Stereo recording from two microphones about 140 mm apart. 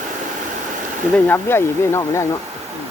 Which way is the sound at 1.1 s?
15° left (ahead or behind).